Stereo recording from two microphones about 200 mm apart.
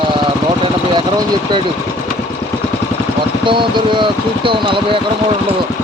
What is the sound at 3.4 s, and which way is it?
Speech, 25° right (ahead or behind).